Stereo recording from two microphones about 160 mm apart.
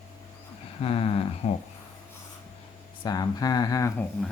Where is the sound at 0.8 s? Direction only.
35° left (ahead or behind).